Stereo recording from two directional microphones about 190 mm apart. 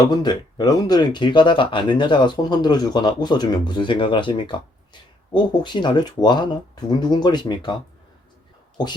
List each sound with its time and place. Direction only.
0.0 s speech: 20° left (ahead or behind)